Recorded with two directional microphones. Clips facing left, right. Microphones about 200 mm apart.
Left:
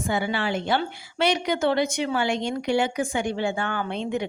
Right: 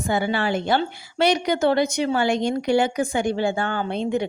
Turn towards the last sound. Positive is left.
turn(degrees=-35)  # may be behind; listen again after turning